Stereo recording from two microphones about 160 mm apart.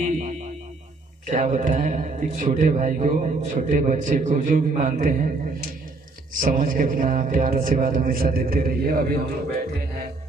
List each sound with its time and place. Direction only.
0.0 s music: 55° right (ahead or behind)
1.3 s a man's voice: 50° right (ahead or behind)
6.4 s a sound: 60° right (ahead or behind)